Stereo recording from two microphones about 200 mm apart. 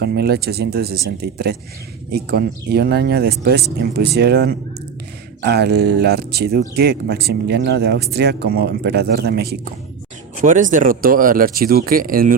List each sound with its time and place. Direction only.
0.0 s speech: 50° right (ahead or behind)
10.4 s speech: 40° right (ahead or behind)